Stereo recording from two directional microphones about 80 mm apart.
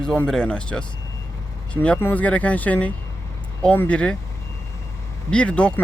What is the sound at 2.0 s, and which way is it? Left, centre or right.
Speech, centre.